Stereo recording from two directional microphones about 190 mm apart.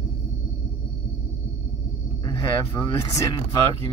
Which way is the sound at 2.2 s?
20° left (ahead or behind).